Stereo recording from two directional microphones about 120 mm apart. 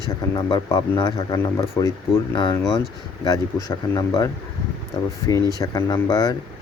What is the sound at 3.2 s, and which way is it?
Speech, 30° left (ahead or behind).